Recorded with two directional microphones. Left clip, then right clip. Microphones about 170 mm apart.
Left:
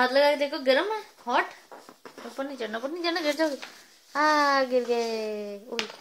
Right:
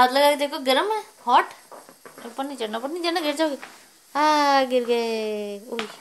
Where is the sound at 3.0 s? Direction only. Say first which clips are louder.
Right 3 dB; 30° right (ahead or behind).